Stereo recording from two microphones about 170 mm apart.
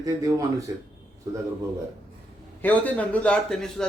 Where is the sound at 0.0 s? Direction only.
20° right (ahead or behind).